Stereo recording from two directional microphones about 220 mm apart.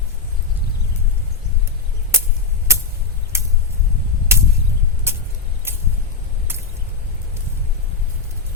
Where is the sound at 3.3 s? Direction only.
10° right (ahead or behind).